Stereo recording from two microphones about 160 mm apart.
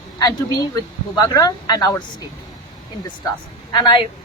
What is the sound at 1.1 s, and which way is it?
Speech, 25° left (ahead or behind).